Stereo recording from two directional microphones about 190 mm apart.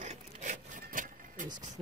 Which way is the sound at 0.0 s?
40° right (ahead or behind).